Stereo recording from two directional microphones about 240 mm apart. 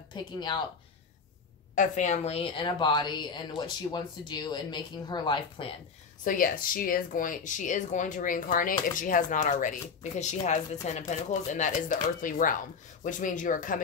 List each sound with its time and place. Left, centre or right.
0.1 s a woman's voice: centre
1.8 s a woman's voice: left
6.2 s a woman's voice: left